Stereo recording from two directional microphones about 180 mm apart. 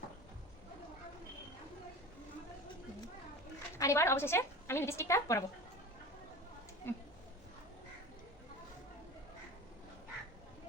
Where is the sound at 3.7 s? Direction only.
15° left (ahead or behind).